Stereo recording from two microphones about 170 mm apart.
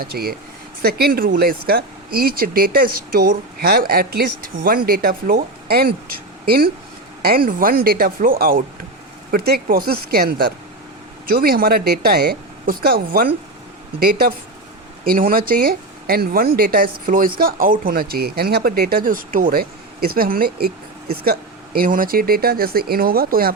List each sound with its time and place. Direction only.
0.0 s speech: 65° right (ahead or behind)